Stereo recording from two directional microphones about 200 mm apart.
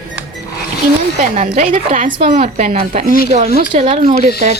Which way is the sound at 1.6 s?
40° right (ahead or behind).